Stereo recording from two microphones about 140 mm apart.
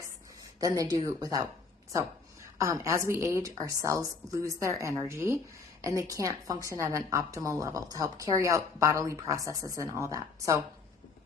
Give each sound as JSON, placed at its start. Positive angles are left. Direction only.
{"t": 0.6, "sound": "a woman's voice", "side_deg": -25}
{"t": 2.6, "sound": "a woman's voice", "side_deg": -20}